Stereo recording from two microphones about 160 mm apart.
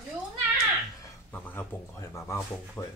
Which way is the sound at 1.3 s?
10° left (ahead or behind).